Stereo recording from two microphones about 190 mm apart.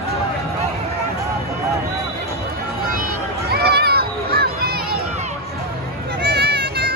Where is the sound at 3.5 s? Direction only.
55° right (ahead or behind).